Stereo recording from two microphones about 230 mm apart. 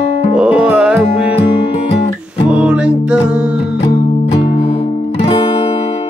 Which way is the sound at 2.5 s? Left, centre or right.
Centre.